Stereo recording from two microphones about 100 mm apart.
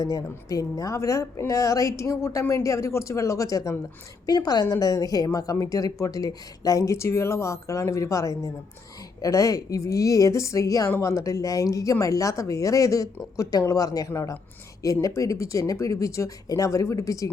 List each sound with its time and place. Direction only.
0.0 s a woman's voice: 35° left (ahead or behind)